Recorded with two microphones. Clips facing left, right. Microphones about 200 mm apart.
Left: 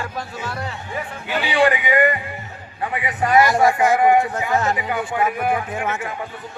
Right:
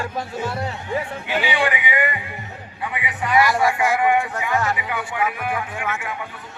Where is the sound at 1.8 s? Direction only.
40° left (ahead or behind).